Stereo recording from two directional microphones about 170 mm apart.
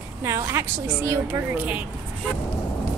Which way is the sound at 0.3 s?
15° right (ahead or behind).